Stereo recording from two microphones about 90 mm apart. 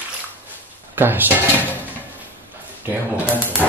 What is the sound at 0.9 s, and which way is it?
Speech, 25° right (ahead or behind).